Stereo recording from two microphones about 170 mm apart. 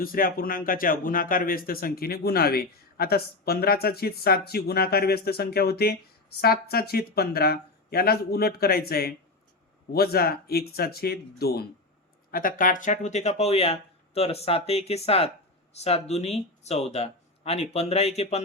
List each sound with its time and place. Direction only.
0.0 s speech: 60° left (ahead or behind)
12.3 s speech: 55° left (ahead or behind); by 18.4 s 40° left (ahead or behind)